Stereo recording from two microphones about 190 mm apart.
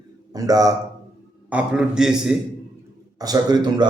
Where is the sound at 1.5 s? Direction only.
5° right (ahead or behind).